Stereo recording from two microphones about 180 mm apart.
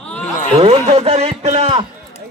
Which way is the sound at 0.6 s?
35° right (ahead or behind).